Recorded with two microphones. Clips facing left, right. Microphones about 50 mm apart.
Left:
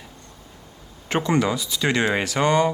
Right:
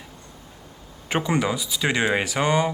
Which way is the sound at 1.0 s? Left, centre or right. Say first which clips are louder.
Left 2 dB; centre.